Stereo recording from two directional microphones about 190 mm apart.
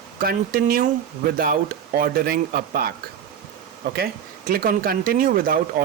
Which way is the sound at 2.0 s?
50° right (ahead or behind).